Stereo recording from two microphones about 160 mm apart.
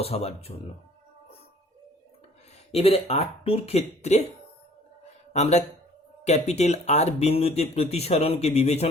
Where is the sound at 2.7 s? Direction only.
40° left (ahead or behind).